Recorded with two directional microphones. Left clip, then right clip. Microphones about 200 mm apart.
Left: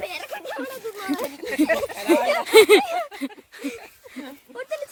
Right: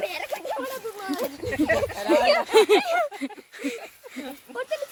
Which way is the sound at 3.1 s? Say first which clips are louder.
Left 1 dB; 15° left (ahead or behind).